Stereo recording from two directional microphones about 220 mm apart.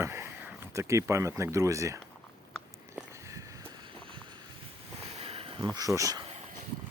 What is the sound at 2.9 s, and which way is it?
Walk, 15° right (ahead or behind).